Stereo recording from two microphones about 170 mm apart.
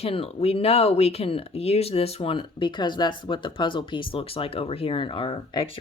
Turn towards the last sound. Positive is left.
turn(degrees=30)  # may be behind; listen again after turning